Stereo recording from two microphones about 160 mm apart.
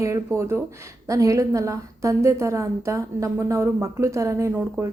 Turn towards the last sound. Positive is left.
turn(degrees=-20)  # may be behind; listen again after turning